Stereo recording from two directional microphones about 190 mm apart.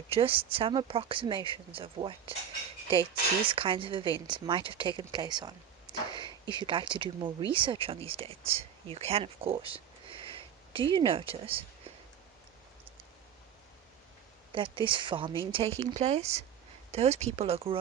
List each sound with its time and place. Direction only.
0.1 s speech: 30° right (ahead or behind)
3.4 s a woman's voice: 25° right (ahead or behind)
14.5 s speech: 25° right (ahead or behind)